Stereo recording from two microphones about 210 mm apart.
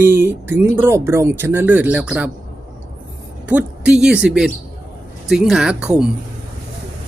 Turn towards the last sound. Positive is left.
turn(degrees=-5)  # may be behind; listen again after turning